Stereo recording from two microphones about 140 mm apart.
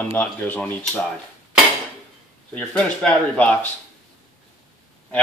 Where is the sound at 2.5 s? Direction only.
5° left (ahead or behind).